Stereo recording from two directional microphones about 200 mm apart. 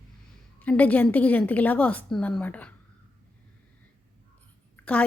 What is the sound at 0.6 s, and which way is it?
A woman's voice, 5° left (ahead or behind).